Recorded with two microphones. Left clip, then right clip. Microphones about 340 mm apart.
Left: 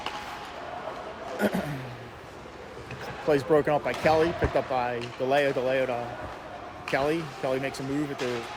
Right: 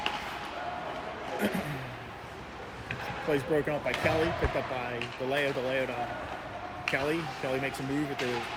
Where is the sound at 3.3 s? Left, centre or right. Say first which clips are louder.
Left 7 dB; centre.